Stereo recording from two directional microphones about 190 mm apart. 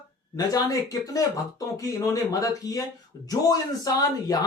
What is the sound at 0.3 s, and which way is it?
Speech, 20° left (ahead or behind).